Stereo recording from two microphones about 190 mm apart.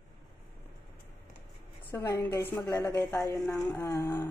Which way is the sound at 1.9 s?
15° left (ahead or behind).